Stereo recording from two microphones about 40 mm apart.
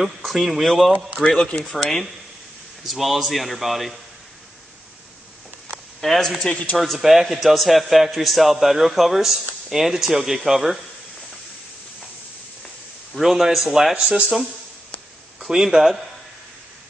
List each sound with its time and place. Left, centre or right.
0.0 s a man's voice: centre
1.2 s a man's voice: centre
5.9 s a man's voice: centre
13.1 s a man's voice: centre
13.9 s speech: right
15.4 s speech: centre